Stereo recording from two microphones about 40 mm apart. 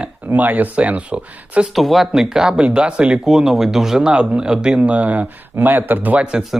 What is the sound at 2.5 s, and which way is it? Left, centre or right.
Speech, right.